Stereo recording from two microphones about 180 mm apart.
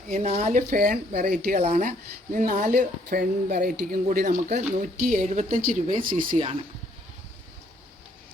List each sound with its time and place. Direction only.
0.1 s speech: 40° right (ahead or behind)
0.7 s speech: 50° right (ahead or behind)